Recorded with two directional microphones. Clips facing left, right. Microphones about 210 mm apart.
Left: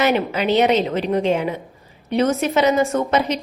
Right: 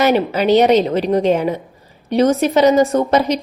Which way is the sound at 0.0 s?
40° right (ahead or behind).